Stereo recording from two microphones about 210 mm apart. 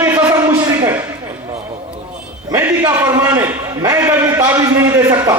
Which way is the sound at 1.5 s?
30° right (ahead or behind).